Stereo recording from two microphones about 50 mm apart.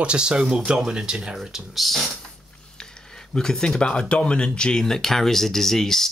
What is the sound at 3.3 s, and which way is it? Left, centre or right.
Speech, centre.